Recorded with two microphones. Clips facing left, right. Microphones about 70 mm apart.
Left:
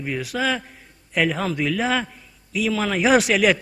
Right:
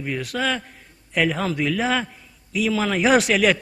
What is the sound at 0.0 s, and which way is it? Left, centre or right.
A man's voice, centre.